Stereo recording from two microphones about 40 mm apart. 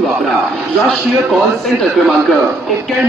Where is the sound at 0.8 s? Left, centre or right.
Centre.